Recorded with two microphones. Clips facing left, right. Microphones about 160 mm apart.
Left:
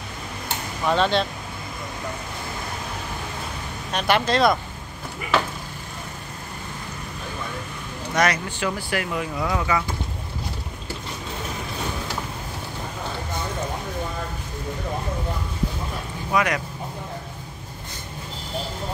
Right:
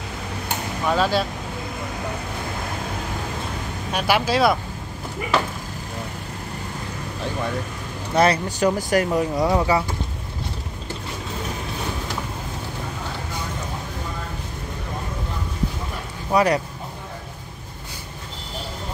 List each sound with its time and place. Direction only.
0.8 s speech: 5° right (ahead or behind)
3.9 s speech: 5° right (ahead or behind)
8.1 s speech: 30° right (ahead or behind)
16.3 s speech: 35° right (ahead or behind)